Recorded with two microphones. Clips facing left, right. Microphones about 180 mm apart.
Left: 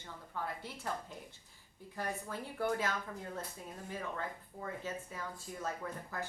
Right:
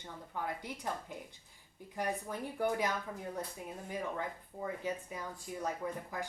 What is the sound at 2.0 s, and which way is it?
Speech, 15° right (ahead or behind).